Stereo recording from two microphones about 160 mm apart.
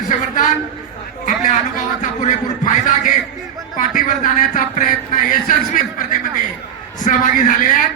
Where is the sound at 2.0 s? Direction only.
50° left (ahead or behind).